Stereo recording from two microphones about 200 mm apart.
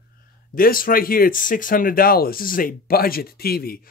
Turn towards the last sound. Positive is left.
turn(degrees=50)  # may be behind; listen again after turning